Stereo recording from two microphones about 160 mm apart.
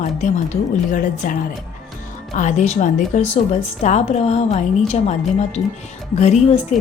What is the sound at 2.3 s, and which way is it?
A woman's voice, 45° left (ahead or behind).